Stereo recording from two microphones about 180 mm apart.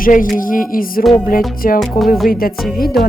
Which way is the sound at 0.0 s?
50° left (ahead or behind).